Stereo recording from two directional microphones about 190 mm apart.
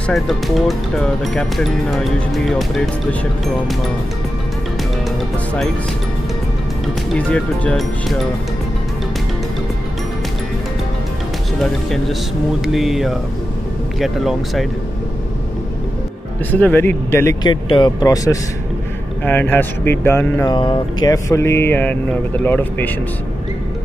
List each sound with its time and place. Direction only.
0.0 s speech: centre (ahead or behind)
7.2 s speech: 5° left (ahead or behind)
11.6 s speech: centre (ahead or behind)
16.5 s speech: 10° left (ahead or behind)